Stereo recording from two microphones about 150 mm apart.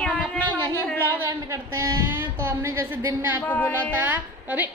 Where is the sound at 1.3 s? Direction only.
20° right (ahead or behind).